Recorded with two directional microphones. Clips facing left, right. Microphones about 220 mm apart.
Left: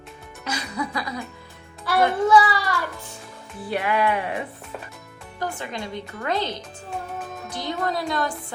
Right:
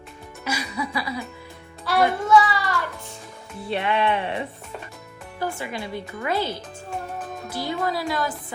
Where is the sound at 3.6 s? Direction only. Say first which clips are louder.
Even; 25° right (ahead or behind).